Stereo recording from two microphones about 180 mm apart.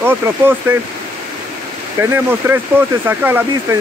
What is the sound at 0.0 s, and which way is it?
Speech, 10° right (ahead or behind).